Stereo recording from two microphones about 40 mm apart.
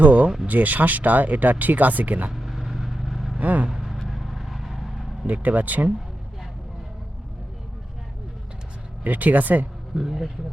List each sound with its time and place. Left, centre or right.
0.0 s a sound: right
0.4 s speech: right
2.3 s vehicle: centre
3.4 s speech: right
3.7 s vehicle: centre
5.2 s speech: right
9.0 s speech: right
9.9 s speech: centre